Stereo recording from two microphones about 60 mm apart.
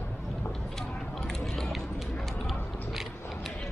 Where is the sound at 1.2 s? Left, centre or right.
Centre.